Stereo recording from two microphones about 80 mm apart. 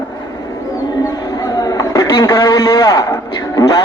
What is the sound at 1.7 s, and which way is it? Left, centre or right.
A man's voice, left.